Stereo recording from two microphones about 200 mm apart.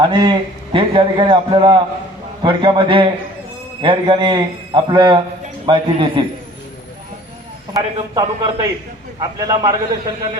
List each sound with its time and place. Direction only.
0.0 s a man's voice: 25° right (ahead or behind)
7.7 s a man's voice: 20° right (ahead or behind)